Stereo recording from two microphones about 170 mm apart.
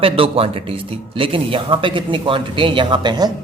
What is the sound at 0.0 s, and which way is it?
A man's voice, 35° right (ahead or behind).